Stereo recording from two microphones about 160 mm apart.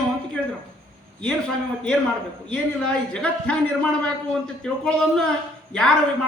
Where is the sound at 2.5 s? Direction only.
5° left (ahead or behind).